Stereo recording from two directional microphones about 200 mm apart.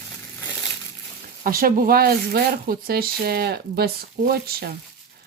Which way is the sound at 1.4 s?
45° right (ahead or behind).